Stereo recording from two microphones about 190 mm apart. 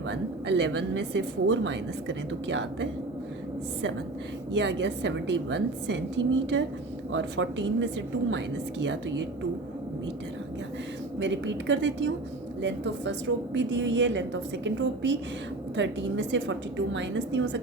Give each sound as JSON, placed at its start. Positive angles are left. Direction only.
{"t": 0.1, "sound": "a woman's voice", "side_deg": -65}
{"t": 4.5, "sound": "a woman's voice", "side_deg": -70}
{"t": 11.2, "sound": "a woman's voice", "side_deg": -70}